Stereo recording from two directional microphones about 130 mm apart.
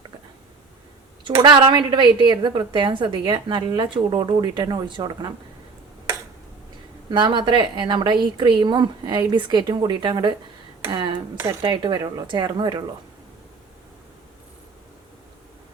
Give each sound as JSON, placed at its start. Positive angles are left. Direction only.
{"t": 1.2, "sound": "a woman's voice", "side_deg": -35}
{"t": 7.1, "sound": "a woman's voice", "side_deg": -35}